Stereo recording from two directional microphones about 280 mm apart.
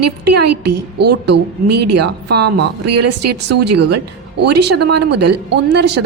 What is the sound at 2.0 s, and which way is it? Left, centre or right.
Speech, right.